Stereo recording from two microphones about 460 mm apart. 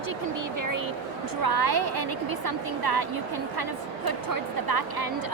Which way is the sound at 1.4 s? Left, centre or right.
Right.